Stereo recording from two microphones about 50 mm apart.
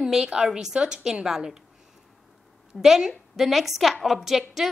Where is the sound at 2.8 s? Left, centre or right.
Centre.